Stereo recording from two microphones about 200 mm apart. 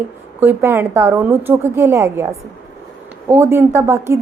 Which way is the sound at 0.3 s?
10° right (ahead or behind).